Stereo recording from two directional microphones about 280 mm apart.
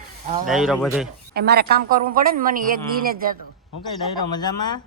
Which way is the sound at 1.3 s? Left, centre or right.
Right.